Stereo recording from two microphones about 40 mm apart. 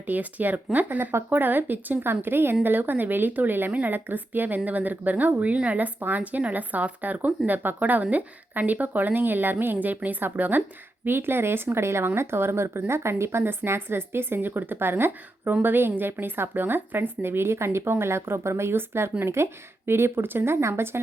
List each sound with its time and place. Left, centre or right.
0.1 s a woman's voice: right
2.6 s speech: right
3.7 s a woman's voice: right
3.9 s a woman's voice: right
6.0 s a woman's voice: right
11.0 s speech: right
17.2 s speech: right